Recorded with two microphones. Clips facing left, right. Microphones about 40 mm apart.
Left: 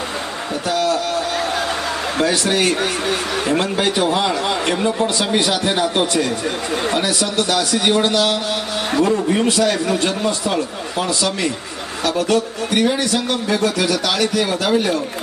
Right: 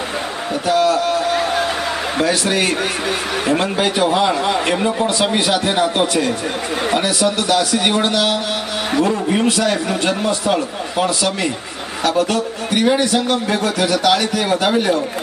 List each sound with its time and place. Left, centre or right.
0.7 s a sound: centre
2.1 s speech: centre
7.5 s speech: centre
12.8 s speech: centre